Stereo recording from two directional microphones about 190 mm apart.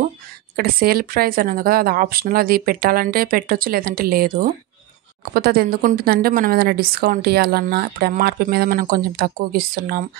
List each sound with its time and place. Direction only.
0.6 s a woman's voice: 50° right (ahead or behind)